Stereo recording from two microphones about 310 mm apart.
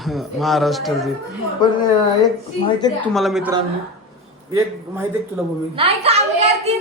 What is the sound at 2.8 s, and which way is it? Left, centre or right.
Speech, centre.